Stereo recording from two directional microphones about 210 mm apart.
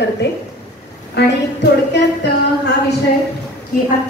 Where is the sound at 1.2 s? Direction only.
55° left (ahead or behind).